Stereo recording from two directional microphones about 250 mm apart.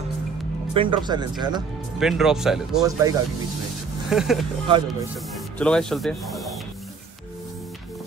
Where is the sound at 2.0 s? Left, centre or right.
Centre.